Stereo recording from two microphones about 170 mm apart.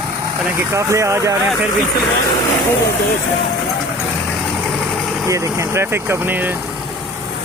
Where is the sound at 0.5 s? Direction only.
15° right (ahead or behind).